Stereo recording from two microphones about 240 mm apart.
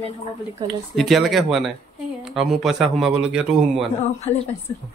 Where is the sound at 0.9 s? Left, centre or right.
Centre.